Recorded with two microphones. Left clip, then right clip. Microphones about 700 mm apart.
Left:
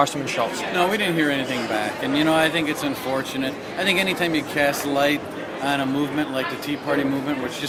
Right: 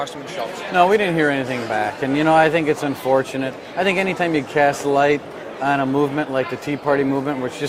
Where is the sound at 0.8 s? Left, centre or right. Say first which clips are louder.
Right 6 dB; right.